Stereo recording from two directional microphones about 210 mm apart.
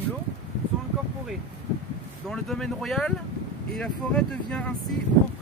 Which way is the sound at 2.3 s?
Centre (ahead or behind).